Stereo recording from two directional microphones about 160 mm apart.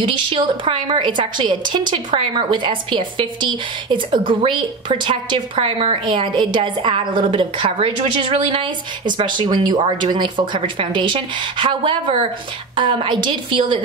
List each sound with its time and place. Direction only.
0.0 s a woman's voice: 35° right (ahead or behind)